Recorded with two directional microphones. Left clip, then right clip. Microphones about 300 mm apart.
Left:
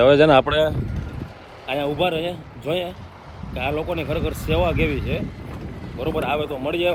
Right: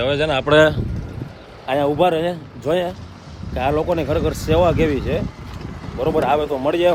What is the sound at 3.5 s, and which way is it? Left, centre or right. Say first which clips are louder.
Speech: right 6 dB; centre.